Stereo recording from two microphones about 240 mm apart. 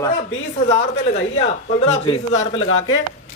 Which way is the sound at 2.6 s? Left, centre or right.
Left.